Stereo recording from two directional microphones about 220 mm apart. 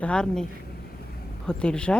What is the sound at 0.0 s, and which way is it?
Speech, 5° left (ahead or behind).